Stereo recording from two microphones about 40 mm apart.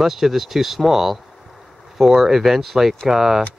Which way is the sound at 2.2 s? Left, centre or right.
Centre.